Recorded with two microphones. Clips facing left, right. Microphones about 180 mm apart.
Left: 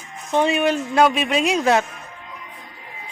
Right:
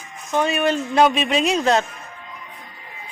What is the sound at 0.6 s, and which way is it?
Speech, 5° left (ahead or behind).